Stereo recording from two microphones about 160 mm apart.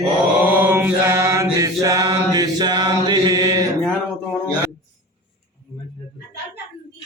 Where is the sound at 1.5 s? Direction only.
20° right (ahead or behind).